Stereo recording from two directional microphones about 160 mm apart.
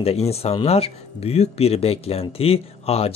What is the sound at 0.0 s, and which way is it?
Speech, 40° left (ahead or behind).